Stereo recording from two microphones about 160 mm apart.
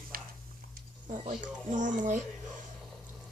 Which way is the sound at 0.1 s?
65° right (ahead or behind).